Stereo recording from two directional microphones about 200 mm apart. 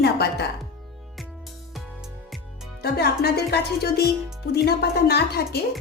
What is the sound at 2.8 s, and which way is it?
Speech, 50° left (ahead or behind).